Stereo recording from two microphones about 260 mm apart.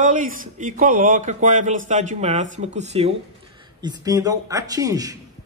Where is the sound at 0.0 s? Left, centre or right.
Right.